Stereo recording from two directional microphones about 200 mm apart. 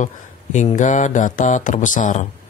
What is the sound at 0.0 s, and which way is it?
Speech, 35° left (ahead or behind).